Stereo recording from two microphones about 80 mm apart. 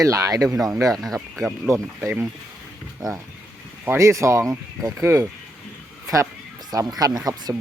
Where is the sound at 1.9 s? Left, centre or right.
Right.